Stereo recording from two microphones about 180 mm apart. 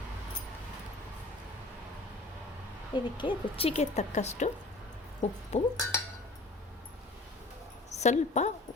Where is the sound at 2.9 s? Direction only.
25° left (ahead or behind).